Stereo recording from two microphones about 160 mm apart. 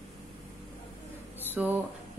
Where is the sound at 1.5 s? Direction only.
10° right (ahead or behind).